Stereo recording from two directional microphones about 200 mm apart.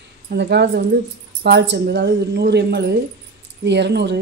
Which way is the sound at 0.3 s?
55° right (ahead or behind).